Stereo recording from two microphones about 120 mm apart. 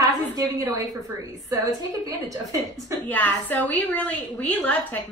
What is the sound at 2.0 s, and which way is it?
Speech, 30° right (ahead or behind).